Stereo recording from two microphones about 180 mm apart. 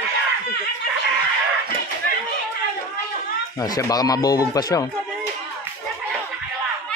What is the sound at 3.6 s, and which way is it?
Speech, 20° left (ahead or behind).